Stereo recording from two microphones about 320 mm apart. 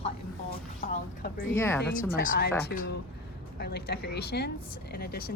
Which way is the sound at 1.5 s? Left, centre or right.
Centre.